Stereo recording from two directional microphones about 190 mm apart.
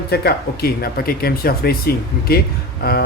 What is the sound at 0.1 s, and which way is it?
Speech, 55° left (ahead or behind).